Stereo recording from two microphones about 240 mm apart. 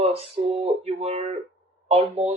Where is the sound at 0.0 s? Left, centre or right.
Right.